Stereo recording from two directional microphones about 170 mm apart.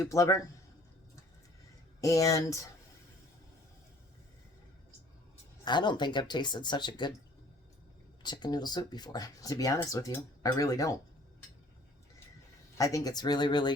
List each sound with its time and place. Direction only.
0.0 s speech: 20° left (ahead or behind)
2.0 s speech: 20° left (ahead or behind)
5.6 s speech: 25° left (ahead or behind)
8.2 s speech: 25° left (ahead or behind)
12.7 s speech: 20° left (ahead or behind)